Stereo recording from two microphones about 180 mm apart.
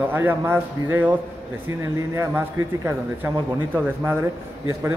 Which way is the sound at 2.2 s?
15° right (ahead or behind).